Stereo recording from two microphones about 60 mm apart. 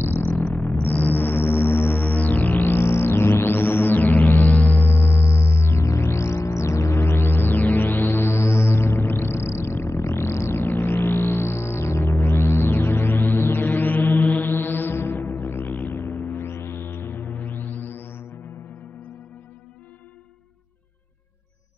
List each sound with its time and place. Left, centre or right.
0.0 s music: left
2.6 s music: left